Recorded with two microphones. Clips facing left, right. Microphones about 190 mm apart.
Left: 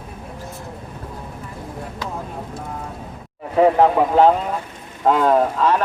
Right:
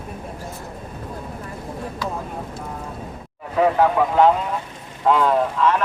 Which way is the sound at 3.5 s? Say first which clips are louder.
Left 3 dB; 30° left (ahead or behind).